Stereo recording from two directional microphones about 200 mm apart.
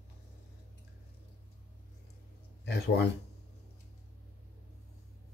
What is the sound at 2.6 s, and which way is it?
Speech, 55° left (ahead or behind).